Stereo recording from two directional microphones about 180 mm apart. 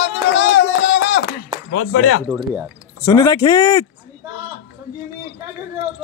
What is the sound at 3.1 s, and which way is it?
Speech, 20° left (ahead or behind).